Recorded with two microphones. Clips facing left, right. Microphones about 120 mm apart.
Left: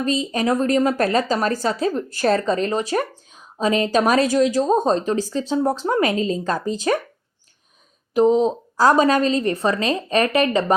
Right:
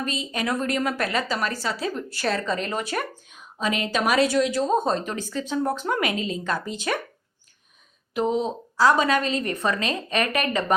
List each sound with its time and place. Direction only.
0.0 s a woman's voice: 35° left (ahead or behind)
8.1 s a woman's voice: 35° left (ahead or behind)